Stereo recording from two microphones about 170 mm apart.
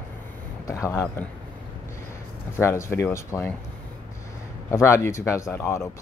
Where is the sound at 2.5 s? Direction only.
15° left (ahead or behind).